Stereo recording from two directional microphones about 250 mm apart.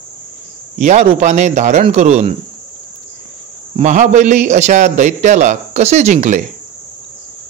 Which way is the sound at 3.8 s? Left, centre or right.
Right.